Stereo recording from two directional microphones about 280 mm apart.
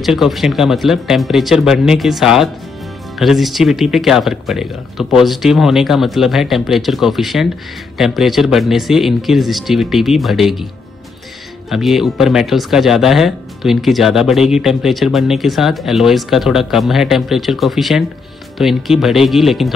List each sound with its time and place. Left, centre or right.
0.0 s speech: centre
11.7 s speech: centre